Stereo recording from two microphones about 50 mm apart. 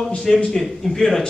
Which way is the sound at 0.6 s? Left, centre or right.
Centre.